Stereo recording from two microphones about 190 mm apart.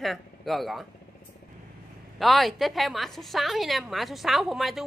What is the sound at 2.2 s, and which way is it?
A woman's voice, centre (ahead or behind).